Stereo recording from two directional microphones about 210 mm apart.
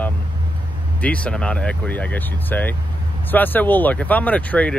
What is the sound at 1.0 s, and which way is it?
Speech, 5° left (ahead or behind).